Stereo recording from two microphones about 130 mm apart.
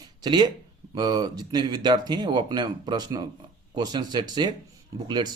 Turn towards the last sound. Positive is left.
turn(degrees=-35)  # may be behind; listen again after turning